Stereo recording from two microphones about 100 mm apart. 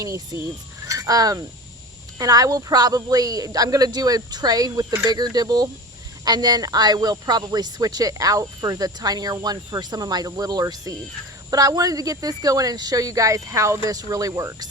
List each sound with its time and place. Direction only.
0.0 s speech: 30° right (ahead or behind)